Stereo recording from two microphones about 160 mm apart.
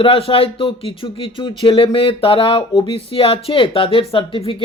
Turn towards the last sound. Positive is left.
turn(degrees=35)  # may be behind; listen again after turning